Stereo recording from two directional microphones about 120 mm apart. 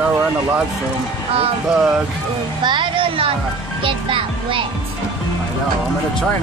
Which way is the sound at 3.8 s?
45° right (ahead or behind).